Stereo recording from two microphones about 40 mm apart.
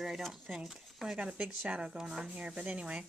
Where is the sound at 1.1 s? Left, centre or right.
Right.